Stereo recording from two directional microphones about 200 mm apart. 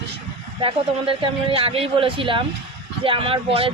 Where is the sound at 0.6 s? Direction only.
25° right (ahead or behind).